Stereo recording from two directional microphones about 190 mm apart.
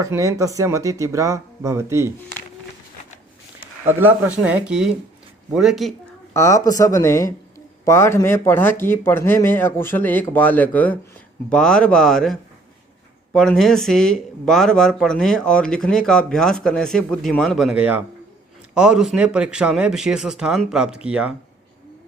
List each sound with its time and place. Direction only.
0.0 s speech: 15° right (ahead or behind)
3.8 s speech: 10° right (ahead or behind)
6.3 s speech: 15° left (ahead or behind); by 21.3 s 5° right (ahead or behind)